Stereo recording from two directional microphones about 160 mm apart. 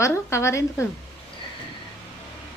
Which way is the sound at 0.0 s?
15° left (ahead or behind).